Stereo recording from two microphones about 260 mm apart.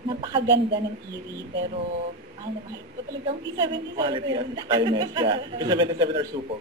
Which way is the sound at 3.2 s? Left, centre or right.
Centre.